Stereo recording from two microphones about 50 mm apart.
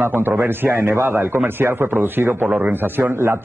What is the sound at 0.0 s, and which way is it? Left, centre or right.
A man's voice, right.